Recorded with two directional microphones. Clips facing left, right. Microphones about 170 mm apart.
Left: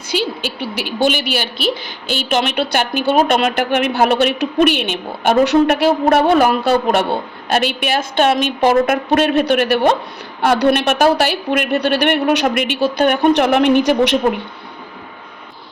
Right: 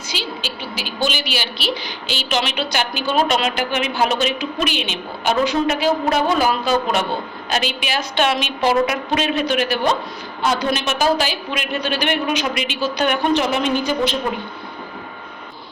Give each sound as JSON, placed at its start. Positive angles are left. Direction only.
{"t": 0.1, "sound": "a woman's voice", "side_deg": 55}